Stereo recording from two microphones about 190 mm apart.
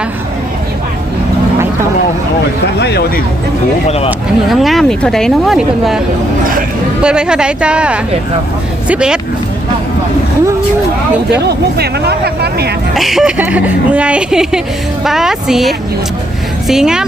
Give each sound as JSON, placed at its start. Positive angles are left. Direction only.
{"t": 2.7, "sound": "speech", "side_deg": 65}
{"t": 3.8, "sound": "speech", "side_deg": 30}
{"t": 4.4, "sound": "speech", "side_deg": 0}
{"t": 7.0, "sound": "speech", "side_deg": -5}
{"t": 11.3, "sound": "speech", "side_deg": -60}
{"t": 12.9, "sound": "speech", "side_deg": 0}